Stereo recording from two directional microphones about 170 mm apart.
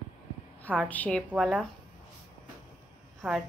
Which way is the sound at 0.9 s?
10° left (ahead or behind).